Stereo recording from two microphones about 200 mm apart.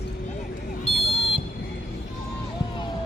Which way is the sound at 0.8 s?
30° left (ahead or behind).